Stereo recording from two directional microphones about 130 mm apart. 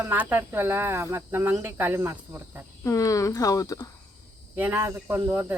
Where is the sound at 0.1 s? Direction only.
15° right (ahead or behind).